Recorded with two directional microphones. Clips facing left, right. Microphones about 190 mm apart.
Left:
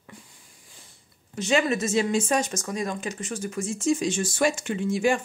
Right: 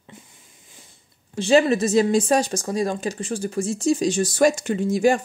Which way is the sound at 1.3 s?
35° right (ahead or behind).